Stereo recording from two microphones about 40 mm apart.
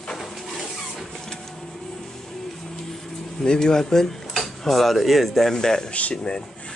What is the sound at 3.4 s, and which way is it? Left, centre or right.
Speech, centre.